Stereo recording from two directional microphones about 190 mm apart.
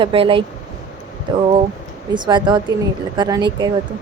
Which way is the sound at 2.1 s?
25° right (ahead or behind).